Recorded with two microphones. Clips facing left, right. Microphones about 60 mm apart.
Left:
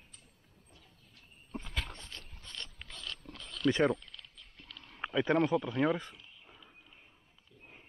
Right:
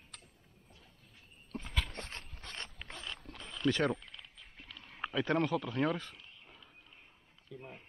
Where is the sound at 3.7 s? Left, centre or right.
Left.